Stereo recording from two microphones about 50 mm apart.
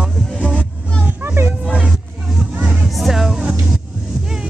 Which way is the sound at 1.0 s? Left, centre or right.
Right.